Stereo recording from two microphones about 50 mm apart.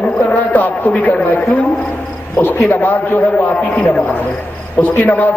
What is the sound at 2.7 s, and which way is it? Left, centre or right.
Speech, left.